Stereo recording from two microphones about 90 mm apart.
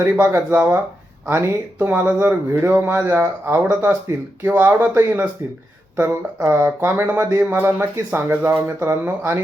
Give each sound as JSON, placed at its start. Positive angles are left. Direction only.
{"t": 0.0, "sound": "speech", "side_deg": -20}